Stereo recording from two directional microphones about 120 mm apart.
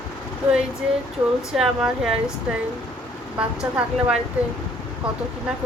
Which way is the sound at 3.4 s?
10° right (ahead or behind).